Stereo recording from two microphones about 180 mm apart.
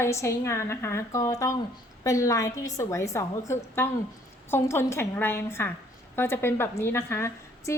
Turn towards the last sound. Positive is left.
turn(degrees=15)  # may be behind; listen again after turning